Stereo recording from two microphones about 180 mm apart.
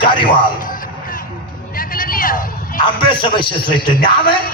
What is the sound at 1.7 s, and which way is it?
Vehicle, 50° left (ahead or behind).